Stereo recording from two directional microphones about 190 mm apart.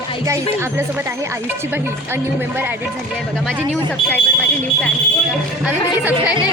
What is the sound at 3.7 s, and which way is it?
Speech, 10° left (ahead or behind).